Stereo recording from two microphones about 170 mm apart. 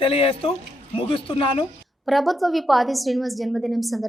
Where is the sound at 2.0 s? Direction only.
Centre (ahead or behind).